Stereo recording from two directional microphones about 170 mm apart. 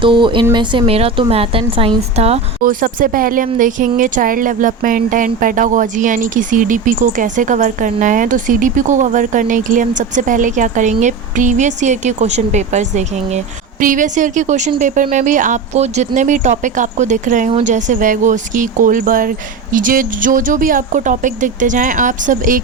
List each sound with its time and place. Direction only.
0.0 s speech: 30° right (ahead or behind)
2.6 s speech: 55° right (ahead or behind)